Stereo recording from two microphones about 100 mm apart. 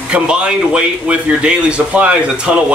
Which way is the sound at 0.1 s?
10° right (ahead or behind).